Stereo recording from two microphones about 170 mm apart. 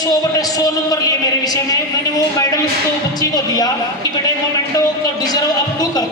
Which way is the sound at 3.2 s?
20° left (ahead or behind).